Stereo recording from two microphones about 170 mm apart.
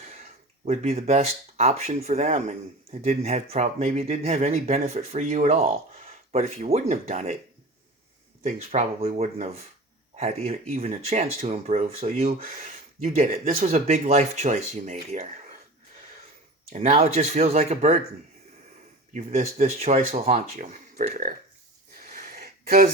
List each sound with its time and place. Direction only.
0.2 s speech: 40° right (ahead or behind)
8.4 s speech: 40° right (ahead or behind)
16.7 s speech: 45° right (ahead or behind)
19.1 s speech: 40° right (ahead or behind)
22.1 s a sound: 55° right (ahead or behind)